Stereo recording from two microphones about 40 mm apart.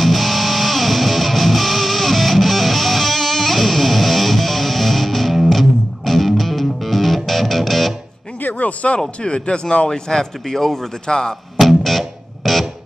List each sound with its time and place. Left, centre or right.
0.0 s music: centre
8.4 s music: left
9.2 s speech: left
9.8 s speech: centre
11.5 s music: centre